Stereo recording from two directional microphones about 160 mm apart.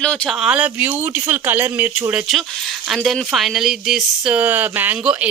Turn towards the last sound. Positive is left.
turn(degrees=-10)  # may be behind; listen again after turning